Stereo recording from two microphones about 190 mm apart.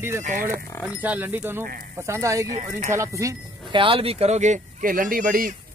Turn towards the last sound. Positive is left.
turn(degrees=-45)  # may be behind; listen again after turning